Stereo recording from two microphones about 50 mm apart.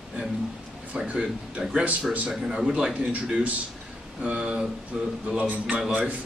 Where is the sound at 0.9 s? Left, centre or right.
Centre.